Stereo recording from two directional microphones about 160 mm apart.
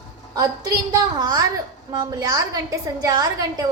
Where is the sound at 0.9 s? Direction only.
25° right (ahead or behind).